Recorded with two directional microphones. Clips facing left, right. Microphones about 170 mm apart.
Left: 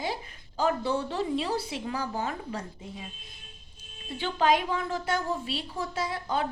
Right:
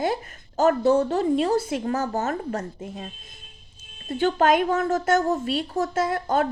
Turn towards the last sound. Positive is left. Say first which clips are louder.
# right 7 dB
turn(degrees=-50)  # may be behind; listen again after turning